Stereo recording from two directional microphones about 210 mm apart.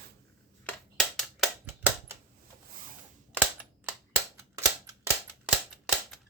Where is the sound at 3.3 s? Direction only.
10° right (ahead or behind).